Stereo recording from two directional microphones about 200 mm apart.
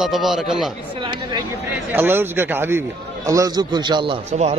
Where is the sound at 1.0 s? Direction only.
25° right (ahead or behind).